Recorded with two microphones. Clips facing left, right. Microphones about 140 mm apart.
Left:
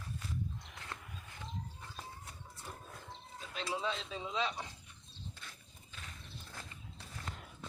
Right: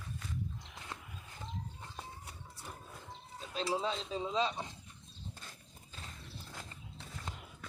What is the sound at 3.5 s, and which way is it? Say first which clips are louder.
Speech: right 3 dB; 30° right (ahead or behind).